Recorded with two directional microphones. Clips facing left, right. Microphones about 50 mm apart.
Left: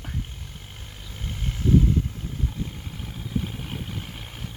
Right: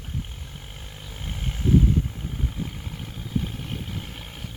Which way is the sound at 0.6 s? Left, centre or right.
Centre.